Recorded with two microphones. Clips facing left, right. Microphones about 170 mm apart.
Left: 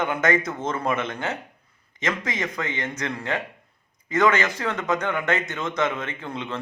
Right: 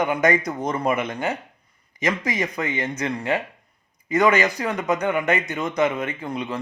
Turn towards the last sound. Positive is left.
turn(degrees=-10)  # may be behind; listen again after turning